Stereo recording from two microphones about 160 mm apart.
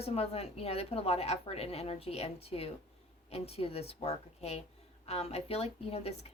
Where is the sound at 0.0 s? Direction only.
40° left (ahead or behind).